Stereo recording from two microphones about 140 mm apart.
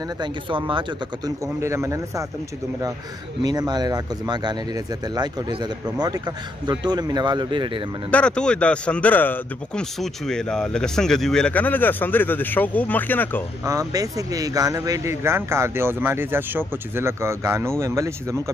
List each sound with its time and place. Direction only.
0.2 s speech: 35° right (ahead or behind)
1.4 s speech: 20° right (ahead or behind)
3.4 s speech: 30° right (ahead or behind)
8.1 s speech: 5° left (ahead or behind)
9.9 s speech: centre (ahead or behind)
13.7 s speech: 25° right (ahead or behind)